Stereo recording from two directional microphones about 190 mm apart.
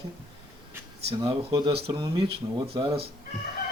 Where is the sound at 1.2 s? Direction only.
20° right (ahead or behind).